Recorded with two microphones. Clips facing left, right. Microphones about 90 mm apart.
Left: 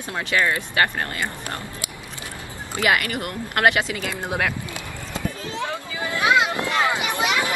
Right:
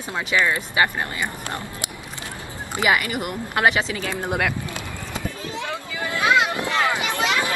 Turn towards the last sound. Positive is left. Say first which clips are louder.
# even
turn(degrees=15)  # may be behind; listen again after turning